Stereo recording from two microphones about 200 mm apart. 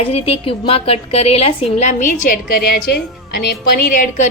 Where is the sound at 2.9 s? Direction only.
50° left (ahead or behind).